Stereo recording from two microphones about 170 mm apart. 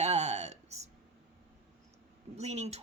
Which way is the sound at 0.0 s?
40° right (ahead or behind).